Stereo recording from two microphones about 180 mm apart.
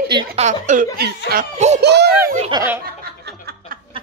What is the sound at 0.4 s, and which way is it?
Speech, 45° right (ahead or behind).